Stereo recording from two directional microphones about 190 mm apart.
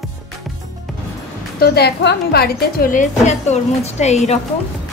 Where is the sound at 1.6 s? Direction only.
55° left (ahead or behind); by 4.4 s 35° left (ahead or behind).